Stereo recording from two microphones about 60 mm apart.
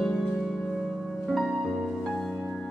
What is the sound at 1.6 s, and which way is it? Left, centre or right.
Music, centre.